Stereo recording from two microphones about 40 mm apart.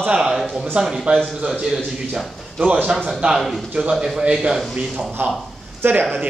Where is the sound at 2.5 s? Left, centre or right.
Right.